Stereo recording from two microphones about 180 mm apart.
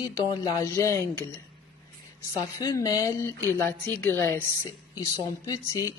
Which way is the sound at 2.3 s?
20° left (ahead or behind).